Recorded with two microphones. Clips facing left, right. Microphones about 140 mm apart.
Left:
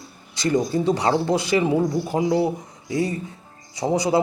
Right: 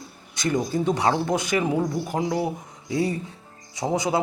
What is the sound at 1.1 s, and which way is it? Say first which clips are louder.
Speech: left 3 dB; 25° left (ahead or behind).